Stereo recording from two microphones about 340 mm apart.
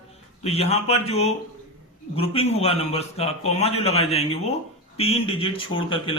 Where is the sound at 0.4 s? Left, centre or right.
Centre.